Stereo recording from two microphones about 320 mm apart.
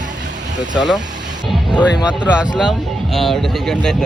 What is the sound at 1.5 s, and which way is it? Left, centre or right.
Music, centre.